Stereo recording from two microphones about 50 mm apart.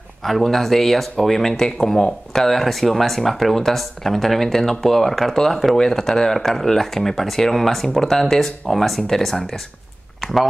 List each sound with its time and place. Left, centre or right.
0.2 s speech: centre
2.4 s speech: centre